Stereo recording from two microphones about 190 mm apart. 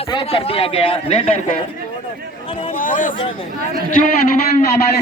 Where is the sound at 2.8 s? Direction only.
45° left (ahead or behind).